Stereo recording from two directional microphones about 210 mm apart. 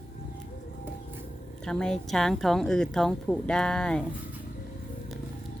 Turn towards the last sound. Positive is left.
turn(degrees=5)  # may be behind; listen again after turning